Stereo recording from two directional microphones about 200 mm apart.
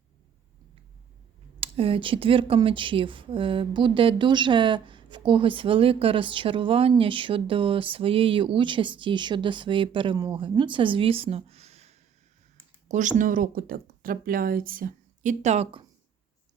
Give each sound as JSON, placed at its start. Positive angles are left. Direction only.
{"t": 1.6, "sound": "speech", "side_deg": -25}